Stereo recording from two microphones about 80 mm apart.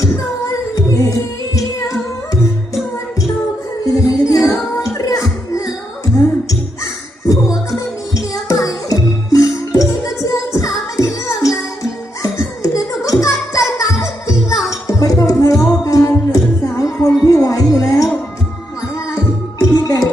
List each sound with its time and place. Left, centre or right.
0.0 s music: left
3.8 s music: left
7.7 s music: left
19.5 s music: left